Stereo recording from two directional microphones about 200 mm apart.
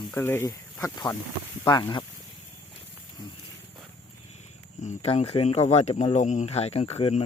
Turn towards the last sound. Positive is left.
turn(degrees=30)  # may be behind; listen again after turning